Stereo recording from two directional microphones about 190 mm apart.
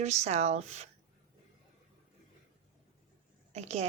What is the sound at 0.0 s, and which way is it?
Speech, 35° right (ahead or behind).